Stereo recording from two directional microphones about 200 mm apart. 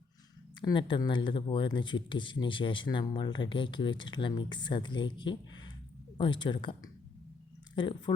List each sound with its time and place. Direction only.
0.6 s speech: 25° left (ahead or behind)